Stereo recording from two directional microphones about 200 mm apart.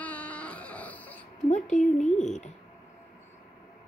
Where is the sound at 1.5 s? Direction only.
40° left (ahead or behind).